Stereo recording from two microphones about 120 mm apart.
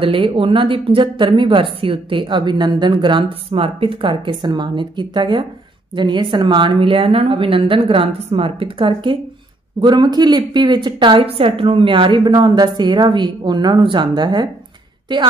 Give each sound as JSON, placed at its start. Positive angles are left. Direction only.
{"t": 0.0, "sound": "a woman's voice", "side_deg": -45}